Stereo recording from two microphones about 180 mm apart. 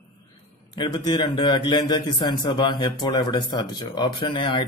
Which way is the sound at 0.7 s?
25° left (ahead or behind).